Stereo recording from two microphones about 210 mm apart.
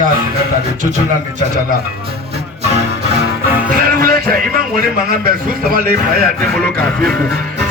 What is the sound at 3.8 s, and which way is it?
Speech, 45° right (ahead or behind).